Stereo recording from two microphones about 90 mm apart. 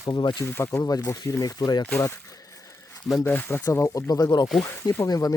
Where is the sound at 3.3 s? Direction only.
20° left (ahead or behind).